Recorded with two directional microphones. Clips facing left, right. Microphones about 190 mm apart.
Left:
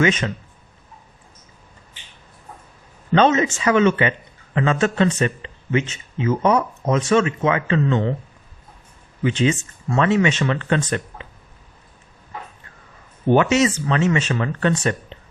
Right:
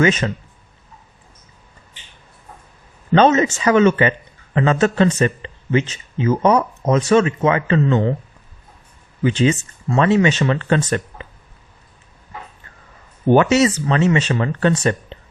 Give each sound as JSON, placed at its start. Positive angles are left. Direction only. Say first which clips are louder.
{"t": 0.0, "sound": "speech", "louder": "right 2 dB", "side_deg": -40}
{"t": 3.1, "sound": "speech", "louder": "right 3 dB", "side_deg": -40}
{"t": 9.2, "sound": "speech", "louder": "right 3 dB", "side_deg": -35}
{"t": 13.3, "sound": "speech", "louder": "right 3 dB", "side_deg": -40}